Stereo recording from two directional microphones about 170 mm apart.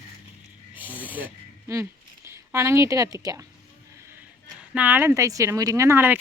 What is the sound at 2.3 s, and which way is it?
A woman's voice, 15° right (ahead or behind).